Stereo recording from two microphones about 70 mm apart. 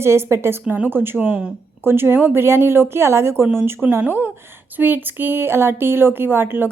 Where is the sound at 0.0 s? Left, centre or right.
Right.